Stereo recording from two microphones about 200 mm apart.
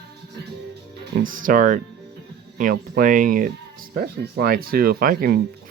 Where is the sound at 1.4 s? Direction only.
45° right (ahead or behind).